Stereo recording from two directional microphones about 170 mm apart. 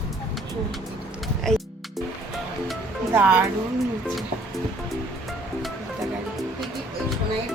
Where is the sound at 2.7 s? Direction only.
10° right (ahead or behind).